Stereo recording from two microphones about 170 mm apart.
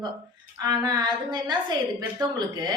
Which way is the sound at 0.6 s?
25° right (ahead or behind).